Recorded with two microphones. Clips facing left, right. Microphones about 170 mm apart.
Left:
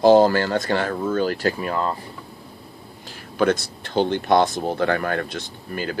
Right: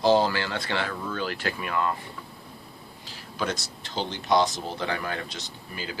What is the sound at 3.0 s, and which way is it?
Speech, 55° left (ahead or behind).